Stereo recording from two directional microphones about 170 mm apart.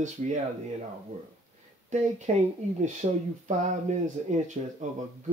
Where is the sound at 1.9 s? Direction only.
45° right (ahead or behind).